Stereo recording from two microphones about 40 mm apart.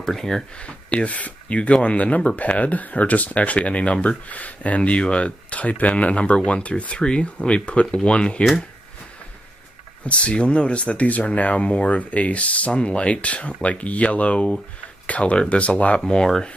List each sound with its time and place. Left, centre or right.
0.0 s speech: centre
0.6 s speech: left
10.0 s speech: left